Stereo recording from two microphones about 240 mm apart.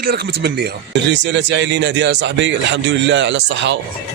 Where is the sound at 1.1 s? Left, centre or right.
Right.